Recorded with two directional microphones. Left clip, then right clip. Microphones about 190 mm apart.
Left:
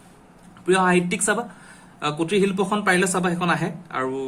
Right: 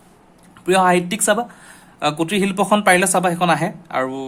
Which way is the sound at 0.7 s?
40° right (ahead or behind).